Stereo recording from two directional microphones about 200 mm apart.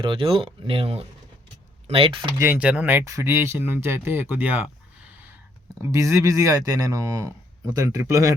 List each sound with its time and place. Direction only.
0.0 s speech: 25° right (ahead or behind)
2.4 s speech: 10° right (ahead or behind)